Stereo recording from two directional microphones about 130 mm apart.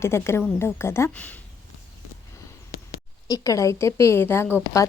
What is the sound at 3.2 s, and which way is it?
A woman's voice, 25° left (ahead or behind).